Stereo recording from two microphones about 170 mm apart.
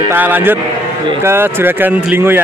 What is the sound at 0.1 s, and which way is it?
Speech, 10° right (ahead or behind).